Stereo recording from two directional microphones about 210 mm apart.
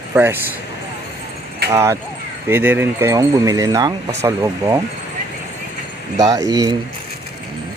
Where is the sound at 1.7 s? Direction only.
15° right (ahead or behind).